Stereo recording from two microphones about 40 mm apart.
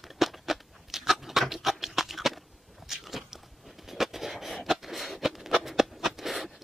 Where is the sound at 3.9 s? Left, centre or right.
Centre.